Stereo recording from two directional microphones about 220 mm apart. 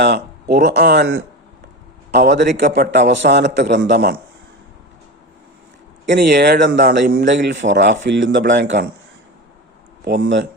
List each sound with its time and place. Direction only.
0.0 s speech: 50° right (ahead or behind)
2.1 s speech: 50° right (ahead or behind)
2.5 s speech: 35° right (ahead or behind)
2.9 s speech: 50° right (ahead or behind)
6.1 s speech: 50° right (ahead or behind)
10.0 s speech: 50° right (ahead or behind)